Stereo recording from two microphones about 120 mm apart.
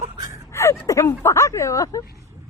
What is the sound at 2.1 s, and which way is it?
Vehicle, 25° right (ahead or behind).